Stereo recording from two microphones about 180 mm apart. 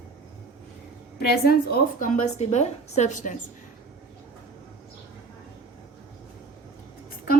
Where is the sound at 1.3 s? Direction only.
55° left (ahead or behind).